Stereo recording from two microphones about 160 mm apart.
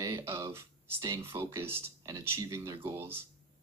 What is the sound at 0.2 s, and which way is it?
Speech, 15° right (ahead or behind).